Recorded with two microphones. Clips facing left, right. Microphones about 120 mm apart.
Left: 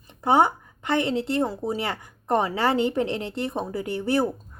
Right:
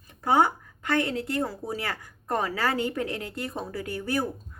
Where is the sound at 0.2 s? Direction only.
25° left (ahead or behind).